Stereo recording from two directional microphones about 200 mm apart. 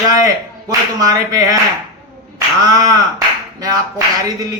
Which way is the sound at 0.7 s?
15° right (ahead or behind).